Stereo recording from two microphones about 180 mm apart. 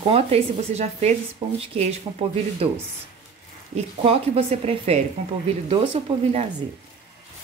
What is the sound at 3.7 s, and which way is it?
Speech, 30° right (ahead or behind).